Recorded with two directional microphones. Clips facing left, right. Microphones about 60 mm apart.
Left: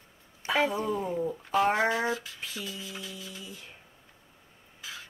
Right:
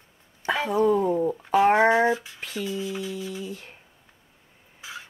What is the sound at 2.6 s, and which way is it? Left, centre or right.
Music, right.